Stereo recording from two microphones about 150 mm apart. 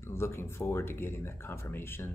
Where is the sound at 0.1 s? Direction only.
15° left (ahead or behind).